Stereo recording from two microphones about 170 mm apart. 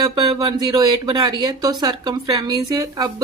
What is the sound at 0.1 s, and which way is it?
Speech, 25° right (ahead or behind).